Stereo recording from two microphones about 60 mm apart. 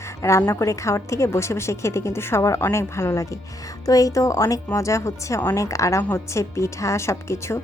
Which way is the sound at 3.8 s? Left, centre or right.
Left.